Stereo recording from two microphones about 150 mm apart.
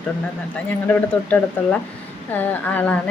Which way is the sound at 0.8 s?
10° left (ahead or behind).